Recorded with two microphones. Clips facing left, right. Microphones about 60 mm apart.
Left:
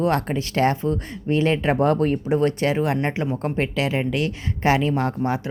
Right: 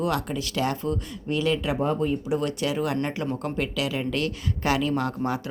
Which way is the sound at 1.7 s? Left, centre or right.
Left.